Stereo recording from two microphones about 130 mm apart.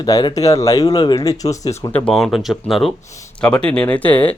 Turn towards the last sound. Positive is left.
turn(degrees=10)  # may be behind; listen again after turning